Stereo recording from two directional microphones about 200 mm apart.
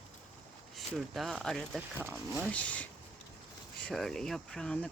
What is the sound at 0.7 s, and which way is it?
Speech, centre (ahead or behind).